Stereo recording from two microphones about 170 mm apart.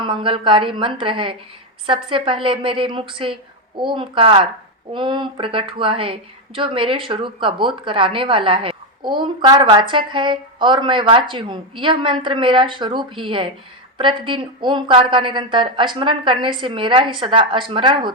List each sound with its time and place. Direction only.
0.0 s a woman's voice: 30° right (ahead or behind)